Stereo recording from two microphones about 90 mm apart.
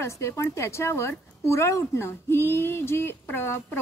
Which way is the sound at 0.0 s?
30° left (ahead or behind).